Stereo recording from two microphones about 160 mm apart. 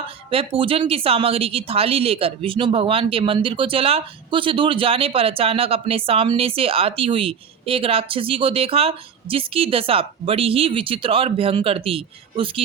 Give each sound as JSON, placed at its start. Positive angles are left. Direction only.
{"t": 0.3, "sound": "a woman's voice", "side_deg": -35}